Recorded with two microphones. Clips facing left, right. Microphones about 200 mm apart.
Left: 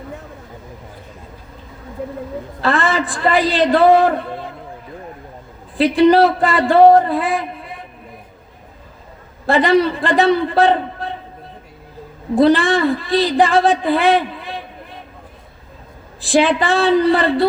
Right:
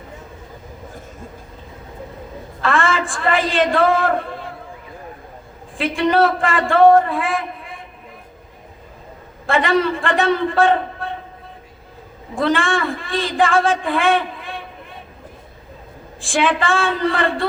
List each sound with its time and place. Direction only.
2.6 s a man's voice: 35° left (ahead or behind)
5.7 s a man's voice: 35° left (ahead or behind)
9.5 s a man's voice: 35° left (ahead or behind)
12.3 s a man's voice: 35° left (ahead or behind)
16.2 s a man's voice: 35° left (ahead or behind)